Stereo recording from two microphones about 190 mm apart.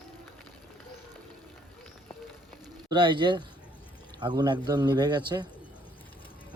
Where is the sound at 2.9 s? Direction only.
25° right (ahead or behind).